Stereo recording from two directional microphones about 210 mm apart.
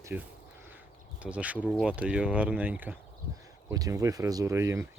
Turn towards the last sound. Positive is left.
turn(degrees=-15)  # may be behind; listen again after turning